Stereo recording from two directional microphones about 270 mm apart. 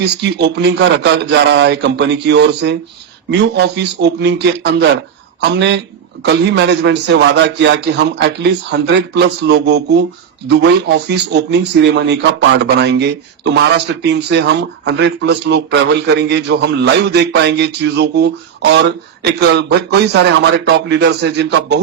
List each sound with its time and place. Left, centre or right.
0.0 s speech: right